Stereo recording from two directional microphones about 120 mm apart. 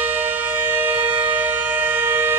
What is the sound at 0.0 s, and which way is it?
Civil defense siren, 15° right (ahead or behind).